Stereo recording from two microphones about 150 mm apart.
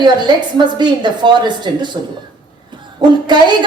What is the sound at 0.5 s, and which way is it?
A woman's voice, 30° right (ahead or behind).